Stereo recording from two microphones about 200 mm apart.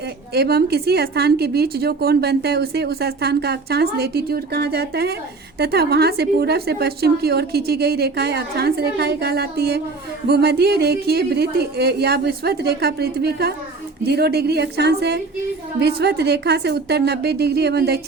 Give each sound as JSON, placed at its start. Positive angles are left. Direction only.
{"t": 0.3, "sound": "a woman's voice", "side_deg": -55}